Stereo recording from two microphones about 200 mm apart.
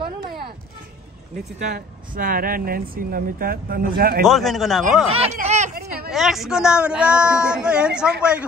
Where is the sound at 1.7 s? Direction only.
45° right (ahead or behind).